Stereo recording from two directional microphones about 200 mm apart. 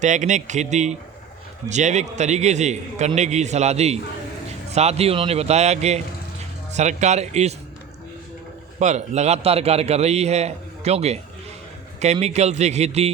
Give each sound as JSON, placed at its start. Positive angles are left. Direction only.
{"t": 0.0, "sound": "a man's voice", "side_deg": -35}
{"t": 8.8, "sound": "a man's voice", "side_deg": -35}